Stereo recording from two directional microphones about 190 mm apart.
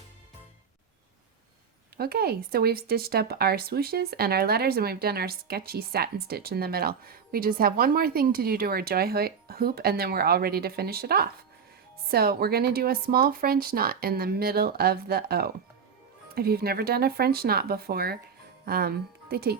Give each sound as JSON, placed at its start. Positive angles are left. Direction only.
{"t": 2.0, "sound": "speech", "side_deg": -55}